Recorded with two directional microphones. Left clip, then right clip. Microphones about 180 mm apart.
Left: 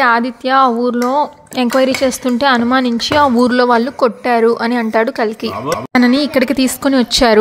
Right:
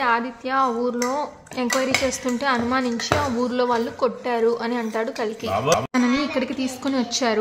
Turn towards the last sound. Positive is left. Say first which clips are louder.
# left 11 dB
turn(degrees=45)  # may be behind; listen again after turning